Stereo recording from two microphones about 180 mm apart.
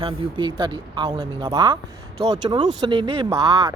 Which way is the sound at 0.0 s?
25° right (ahead or behind).